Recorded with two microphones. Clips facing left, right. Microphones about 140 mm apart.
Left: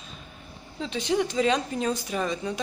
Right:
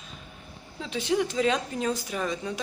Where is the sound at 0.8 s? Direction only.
5° right (ahead or behind).